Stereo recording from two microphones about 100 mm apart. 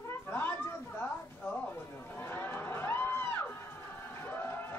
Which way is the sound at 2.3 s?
25° left (ahead or behind).